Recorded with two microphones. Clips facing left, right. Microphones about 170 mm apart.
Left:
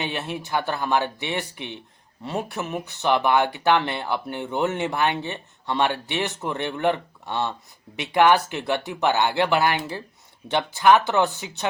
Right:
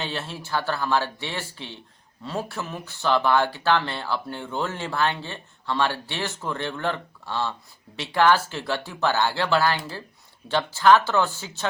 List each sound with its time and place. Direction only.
0.0 s speech: 15° left (ahead or behind)